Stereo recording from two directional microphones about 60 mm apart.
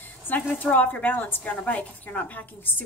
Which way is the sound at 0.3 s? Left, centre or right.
Left.